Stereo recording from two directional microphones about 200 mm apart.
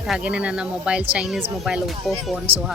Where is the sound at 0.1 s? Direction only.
5° right (ahead or behind).